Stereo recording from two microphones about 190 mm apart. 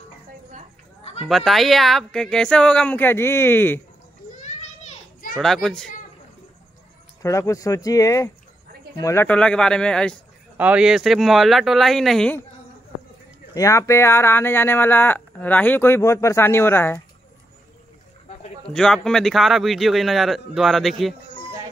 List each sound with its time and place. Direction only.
1.2 s speech: centre (ahead or behind)
5.4 s speech: centre (ahead or behind)
7.2 s speech: 15° left (ahead or behind)
13.6 s speech: 15° left (ahead or behind)
18.7 s speech: 5° left (ahead or behind)